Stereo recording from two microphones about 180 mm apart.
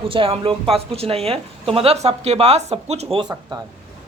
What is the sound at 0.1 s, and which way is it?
A woman's voice, 30° right (ahead or behind).